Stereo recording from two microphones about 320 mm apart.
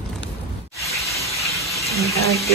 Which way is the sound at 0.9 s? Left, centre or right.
Centre.